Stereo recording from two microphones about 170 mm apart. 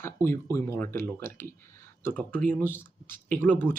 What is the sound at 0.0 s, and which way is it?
Speech, 15° left (ahead or behind).